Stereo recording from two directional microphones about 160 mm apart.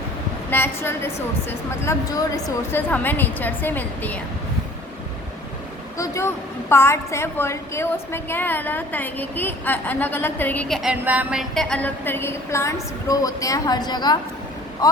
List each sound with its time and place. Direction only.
0.5 s a woman's voice: 15° left (ahead or behind)
6.0 s a woman's voice: 15° left (ahead or behind); by 10.9 s centre (ahead or behind)
11.0 s a woman's voice: 10° right (ahead or behind); by 14.2 s 25° left (ahead or behind)